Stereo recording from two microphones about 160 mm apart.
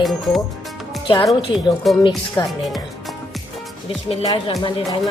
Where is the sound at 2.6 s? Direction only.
Centre (ahead or behind).